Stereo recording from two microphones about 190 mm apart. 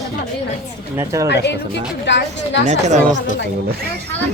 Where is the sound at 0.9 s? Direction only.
15° right (ahead or behind).